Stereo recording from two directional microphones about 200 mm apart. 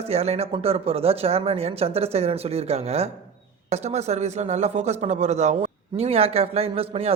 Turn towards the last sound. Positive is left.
turn(degrees=-30)  # may be behind; listen again after turning